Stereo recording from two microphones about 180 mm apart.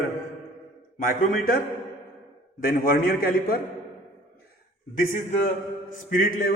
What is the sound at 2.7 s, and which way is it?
Speech, 50° left (ahead or behind).